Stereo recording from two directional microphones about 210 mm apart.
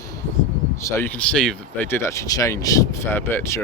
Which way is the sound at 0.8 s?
10° left (ahead or behind).